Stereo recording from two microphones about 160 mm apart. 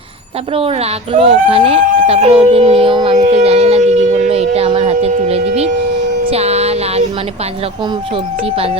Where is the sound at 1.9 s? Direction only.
50° right (ahead or behind).